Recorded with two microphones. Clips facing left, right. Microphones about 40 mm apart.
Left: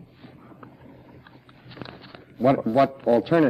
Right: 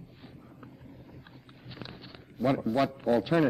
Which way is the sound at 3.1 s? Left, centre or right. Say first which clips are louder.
Left 4 dB; centre.